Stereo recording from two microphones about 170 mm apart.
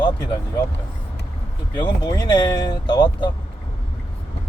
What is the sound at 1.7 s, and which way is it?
Speech, 25° left (ahead or behind).